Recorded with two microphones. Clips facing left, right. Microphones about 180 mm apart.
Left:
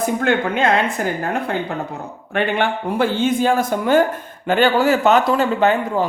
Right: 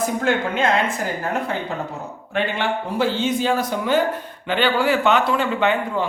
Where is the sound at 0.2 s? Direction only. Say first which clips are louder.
Left 2 dB; 60° left (ahead or behind).